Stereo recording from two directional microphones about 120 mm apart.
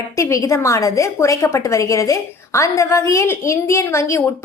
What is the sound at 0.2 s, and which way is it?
A woman's voice, 25° left (ahead or behind).